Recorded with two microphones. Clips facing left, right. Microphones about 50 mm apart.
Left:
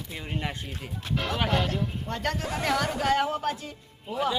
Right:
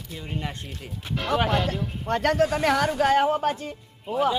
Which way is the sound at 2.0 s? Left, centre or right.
Right.